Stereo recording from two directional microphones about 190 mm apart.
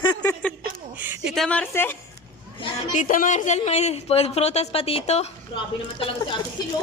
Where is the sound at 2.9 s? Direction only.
45° left (ahead or behind).